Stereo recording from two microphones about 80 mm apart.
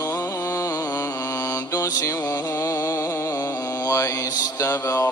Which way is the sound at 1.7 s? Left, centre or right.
Left.